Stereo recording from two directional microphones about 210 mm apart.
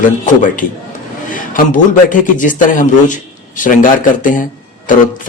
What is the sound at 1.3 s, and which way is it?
A man's voice, 40° left (ahead or behind).